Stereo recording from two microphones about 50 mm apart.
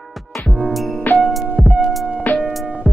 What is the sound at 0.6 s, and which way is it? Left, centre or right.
Music, centre.